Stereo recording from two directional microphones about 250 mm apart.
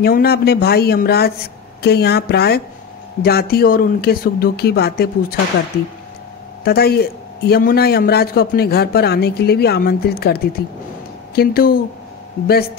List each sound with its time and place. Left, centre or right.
0.0 s a man's voice: left
6.6 s a man's voice: left